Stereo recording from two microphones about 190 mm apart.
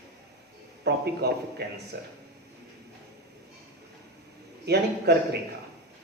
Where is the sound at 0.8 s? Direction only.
60° right (ahead or behind).